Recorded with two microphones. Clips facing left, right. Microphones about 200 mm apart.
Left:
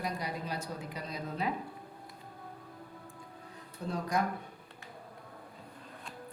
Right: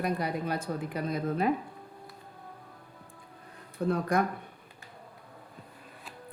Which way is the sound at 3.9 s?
55° right (ahead or behind).